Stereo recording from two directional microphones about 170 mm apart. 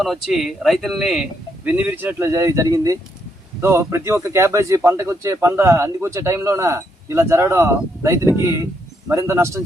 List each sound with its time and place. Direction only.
0.0 s speech: centre (ahead or behind); by 9.6 s 15° right (ahead or behind)